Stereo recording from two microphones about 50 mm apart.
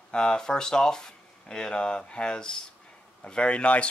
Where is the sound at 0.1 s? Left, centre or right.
Centre.